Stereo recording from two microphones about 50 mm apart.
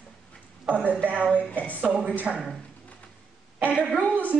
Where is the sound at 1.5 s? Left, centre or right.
Left.